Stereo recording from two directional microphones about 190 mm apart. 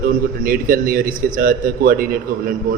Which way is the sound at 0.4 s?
50° right (ahead or behind).